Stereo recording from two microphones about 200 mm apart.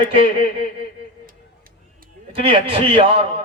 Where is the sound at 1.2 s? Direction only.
45° right (ahead or behind).